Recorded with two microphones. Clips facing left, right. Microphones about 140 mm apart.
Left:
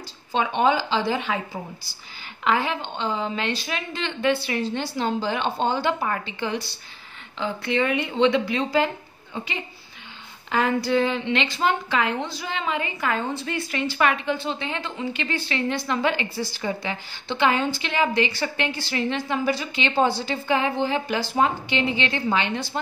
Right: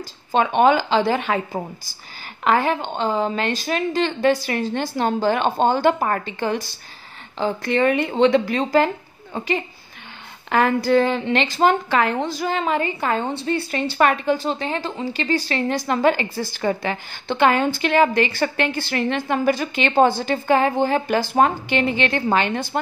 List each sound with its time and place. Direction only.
0.3 s a woman's voice: 55° right (ahead or behind)